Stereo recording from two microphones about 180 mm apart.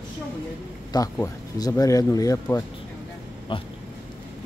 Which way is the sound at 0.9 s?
20° left (ahead or behind).